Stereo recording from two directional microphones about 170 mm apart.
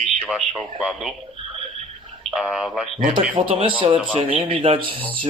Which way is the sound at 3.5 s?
30° right (ahead or behind).